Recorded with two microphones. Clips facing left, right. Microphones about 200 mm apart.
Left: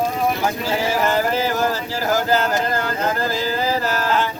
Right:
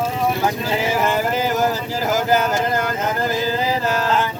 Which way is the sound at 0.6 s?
20° right (ahead or behind).